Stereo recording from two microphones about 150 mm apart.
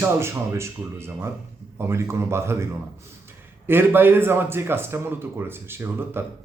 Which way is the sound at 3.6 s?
15° right (ahead or behind).